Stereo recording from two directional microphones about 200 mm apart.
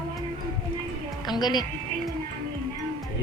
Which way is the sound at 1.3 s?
20° left (ahead or behind).